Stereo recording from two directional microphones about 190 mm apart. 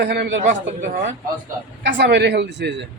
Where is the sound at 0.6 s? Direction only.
40° right (ahead or behind).